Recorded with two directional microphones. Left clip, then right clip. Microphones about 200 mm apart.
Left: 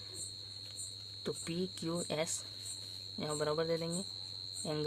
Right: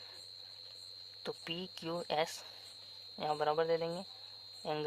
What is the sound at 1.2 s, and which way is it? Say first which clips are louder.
Speech: left 2 dB; 25° right (ahead or behind).